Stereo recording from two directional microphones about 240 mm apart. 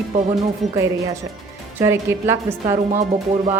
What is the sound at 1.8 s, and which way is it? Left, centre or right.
A woman's voice, centre.